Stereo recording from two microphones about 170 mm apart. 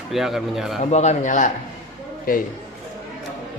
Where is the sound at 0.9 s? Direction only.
40° left (ahead or behind).